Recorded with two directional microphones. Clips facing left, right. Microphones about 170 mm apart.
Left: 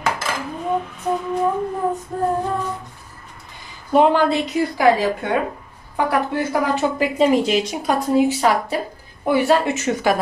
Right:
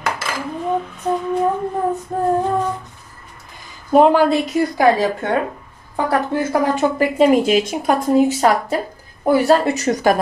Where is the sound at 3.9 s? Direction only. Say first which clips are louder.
Right 3 dB; 40° right (ahead or behind).